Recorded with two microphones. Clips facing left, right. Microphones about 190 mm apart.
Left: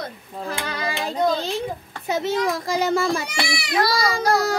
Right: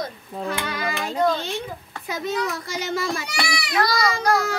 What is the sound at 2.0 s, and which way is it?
A child's voice, 25° left (ahead or behind).